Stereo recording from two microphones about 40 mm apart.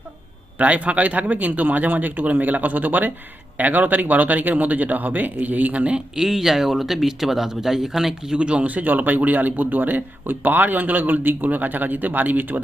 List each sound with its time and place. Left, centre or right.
0.6 s speech: right
6.1 s speech: centre
8.4 s speech: right
8.6 s speech: right